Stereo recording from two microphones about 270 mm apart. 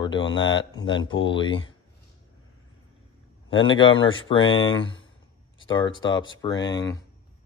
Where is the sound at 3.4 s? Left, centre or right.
Centre.